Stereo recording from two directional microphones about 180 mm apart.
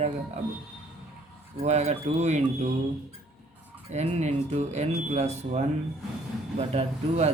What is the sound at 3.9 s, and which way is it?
Speech, 40° right (ahead or behind).